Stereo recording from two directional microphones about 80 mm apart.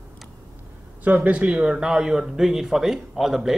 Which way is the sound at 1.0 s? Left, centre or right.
Centre.